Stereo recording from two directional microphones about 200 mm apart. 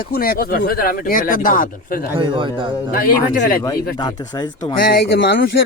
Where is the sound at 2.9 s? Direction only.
45° left (ahead or behind).